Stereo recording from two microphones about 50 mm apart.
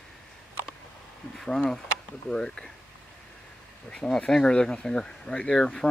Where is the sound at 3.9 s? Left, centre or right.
Centre.